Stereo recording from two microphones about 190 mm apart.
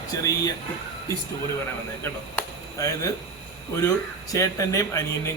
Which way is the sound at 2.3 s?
15° left (ahead or behind).